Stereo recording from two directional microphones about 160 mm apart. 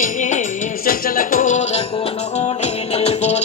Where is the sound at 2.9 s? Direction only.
40° left (ahead or behind).